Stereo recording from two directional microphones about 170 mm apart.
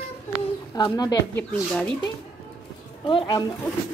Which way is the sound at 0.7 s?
25° left (ahead or behind).